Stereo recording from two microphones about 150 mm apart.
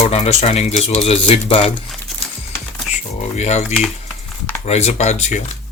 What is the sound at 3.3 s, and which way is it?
Speech, 50° left (ahead or behind).